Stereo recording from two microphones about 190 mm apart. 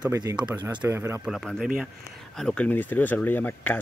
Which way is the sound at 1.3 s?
Centre (ahead or behind).